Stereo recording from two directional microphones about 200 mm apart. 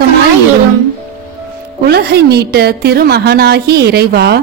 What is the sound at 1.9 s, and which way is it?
A woman's voice, 55° right (ahead or behind).